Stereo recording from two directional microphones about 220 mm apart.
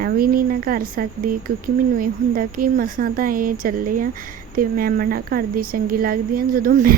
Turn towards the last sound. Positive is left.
turn(degrees=-40)  # may be behind; listen again after turning